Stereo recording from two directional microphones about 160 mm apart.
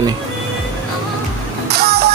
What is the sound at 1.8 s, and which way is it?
Music, 85° right.